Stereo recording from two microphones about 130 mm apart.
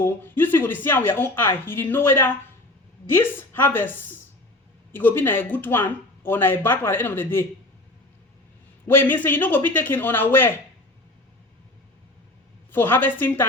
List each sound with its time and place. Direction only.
0.0 s a woman's voice: 15° left (ahead or behind)
8.9 s a woman's voice: 15° left (ahead or behind)
12.7 s a woman's voice: 15° left (ahead or behind)